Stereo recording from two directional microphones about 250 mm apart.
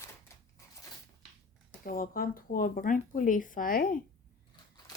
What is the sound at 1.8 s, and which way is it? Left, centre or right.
Speech, left.